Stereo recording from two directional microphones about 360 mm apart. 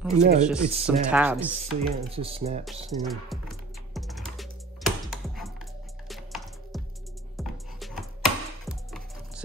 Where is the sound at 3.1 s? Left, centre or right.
Centre.